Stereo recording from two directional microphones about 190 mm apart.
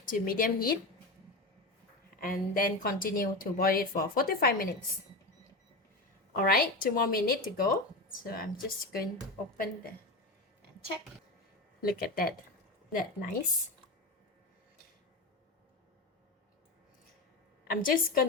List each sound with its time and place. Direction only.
0.0 s speech: 45° left (ahead or behind)
2.2 s speech: 45° left (ahead or behind)
6.3 s speech: 50° left (ahead or behind)
11.8 s speech: 50° left (ahead or behind)
17.7 s speech: 45° left (ahead or behind)